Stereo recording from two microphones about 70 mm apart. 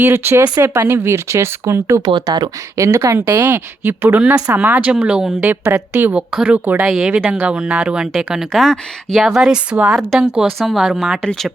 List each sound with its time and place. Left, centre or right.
0.0 s speech: right
2.0 s speech: right
2.7 s speech: right
3.2 s speech: right; by 5.3 s centre
5.4 s a woman's voice: right
6.8 s speech: centre
7.1 s speech: right
8.5 s speech: centre
9.2 s speech: centre
11.2 s speech: centre